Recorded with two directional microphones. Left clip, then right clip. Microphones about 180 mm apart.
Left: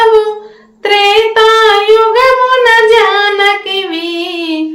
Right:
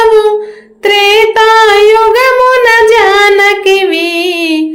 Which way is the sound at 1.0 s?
45° right (ahead or behind).